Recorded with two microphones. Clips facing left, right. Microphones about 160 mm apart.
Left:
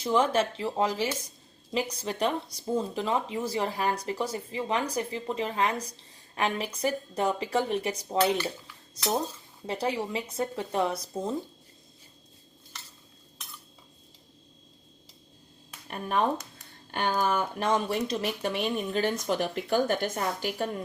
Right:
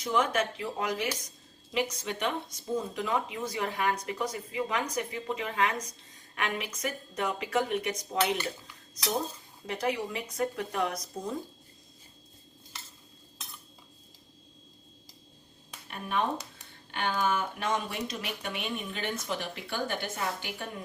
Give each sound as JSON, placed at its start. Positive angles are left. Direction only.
{"t": 0.0, "sound": "speech", "side_deg": 30}
{"t": 15.9, "sound": "speech", "side_deg": 40}